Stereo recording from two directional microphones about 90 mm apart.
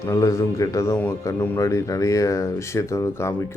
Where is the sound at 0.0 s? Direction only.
35° left (ahead or behind).